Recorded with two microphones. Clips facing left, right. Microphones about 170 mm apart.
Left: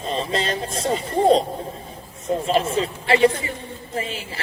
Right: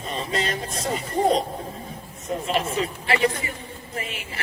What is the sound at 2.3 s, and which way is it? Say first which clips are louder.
A man's voice: left 5 dB; 30° left (ahead or behind).